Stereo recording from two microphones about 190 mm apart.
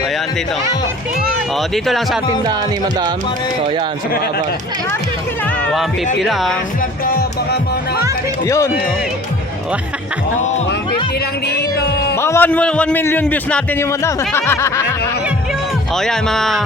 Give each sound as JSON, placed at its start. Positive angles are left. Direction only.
{"t": 6.1, "sound": "a man's voice", "side_deg": 0}
{"t": 7.0, "sound": "music", "side_deg": 55}
{"t": 8.4, "sound": "a man's voice", "side_deg": 15}
{"t": 12.1, "sound": "a man's voice", "side_deg": 15}
{"t": 16.0, "sound": "a man's voice", "side_deg": 0}